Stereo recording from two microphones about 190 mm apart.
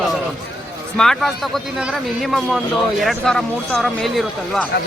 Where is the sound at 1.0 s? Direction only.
Centre (ahead or behind).